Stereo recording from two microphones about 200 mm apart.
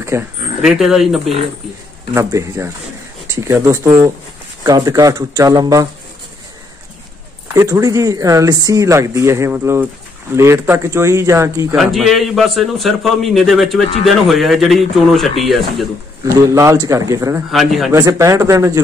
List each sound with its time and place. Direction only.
0.1 s speech: 15° right (ahead or behind)
0.6 s a man's voice: centre (ahead or behind)
2.1 s speech: 15° right (ahead or behind)
7.5 s speech: 15° right (ahead or behind)
11.7 s a man's voice: centre (ahead or behind)
16.3 s speech: 15° right (ahead or behind)
17.5 s a man's voice: centre (ahead or behind)
17.9 s speech: 15° right (ahead or behind)